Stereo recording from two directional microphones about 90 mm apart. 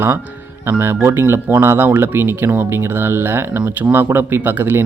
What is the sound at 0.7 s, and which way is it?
Speech, 25° right (ahead or behind).